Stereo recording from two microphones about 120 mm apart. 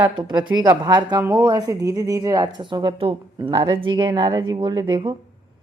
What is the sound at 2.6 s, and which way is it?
A woman's voice, 40° right (ahead or behind).